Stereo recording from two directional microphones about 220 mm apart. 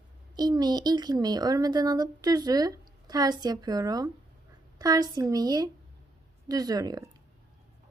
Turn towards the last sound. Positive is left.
turn(degrees=-15)  # may be behind; listen again after turning